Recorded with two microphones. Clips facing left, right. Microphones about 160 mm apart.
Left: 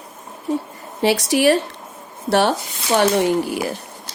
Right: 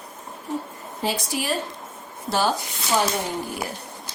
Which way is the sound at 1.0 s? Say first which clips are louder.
Left 11 dB; 75° left (ahead or behind).